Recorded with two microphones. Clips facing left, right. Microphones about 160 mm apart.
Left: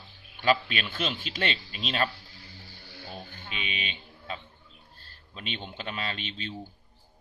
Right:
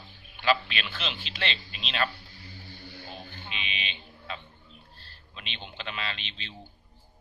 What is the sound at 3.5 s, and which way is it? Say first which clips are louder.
Speech: left 3 dB; 45° left (ahead or behind).